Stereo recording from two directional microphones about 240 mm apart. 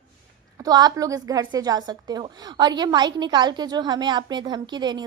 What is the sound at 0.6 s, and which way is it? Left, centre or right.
A woman's voice, centre.